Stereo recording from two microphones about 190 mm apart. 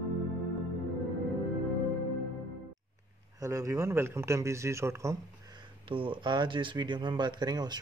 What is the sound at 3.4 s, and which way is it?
Speech, 15° right (ahead or behind).